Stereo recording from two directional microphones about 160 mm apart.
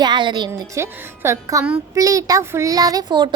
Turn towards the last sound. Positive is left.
turn(degrees=-30)  # may be behind; listen again after turning